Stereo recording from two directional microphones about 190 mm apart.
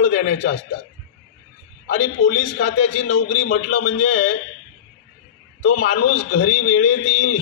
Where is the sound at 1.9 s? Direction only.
40° left (ahead or behind).